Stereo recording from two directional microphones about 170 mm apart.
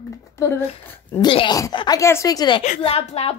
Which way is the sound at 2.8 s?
35° left (ahead or behind).